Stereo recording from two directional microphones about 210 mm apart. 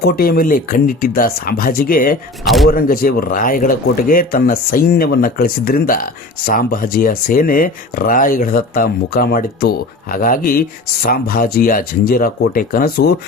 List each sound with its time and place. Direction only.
0.0 s speech: 45° left (ahead or behind)